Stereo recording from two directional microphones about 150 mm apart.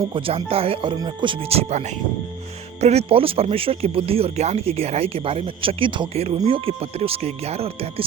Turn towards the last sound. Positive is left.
turn(degrees=-40)  # may be behind; listen again after turning